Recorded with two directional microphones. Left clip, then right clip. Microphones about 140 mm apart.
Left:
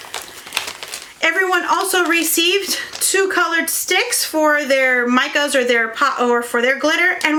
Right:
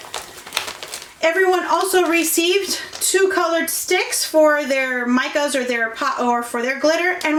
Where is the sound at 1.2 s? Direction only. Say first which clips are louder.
Left 1 dB; 25° left (ahead or behind).